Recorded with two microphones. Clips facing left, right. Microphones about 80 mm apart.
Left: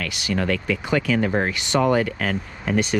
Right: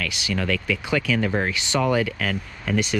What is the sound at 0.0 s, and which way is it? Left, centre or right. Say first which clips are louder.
Speech: left 2 dB; left.